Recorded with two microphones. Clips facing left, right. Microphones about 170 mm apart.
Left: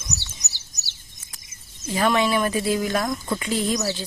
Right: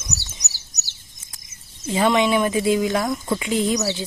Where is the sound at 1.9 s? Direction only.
15° right (ahead or behind).